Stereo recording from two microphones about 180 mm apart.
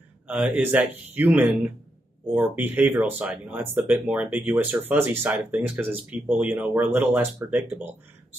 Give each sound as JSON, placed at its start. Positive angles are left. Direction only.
{"t": 0.3, "sound": "speech", "side_deg": -10}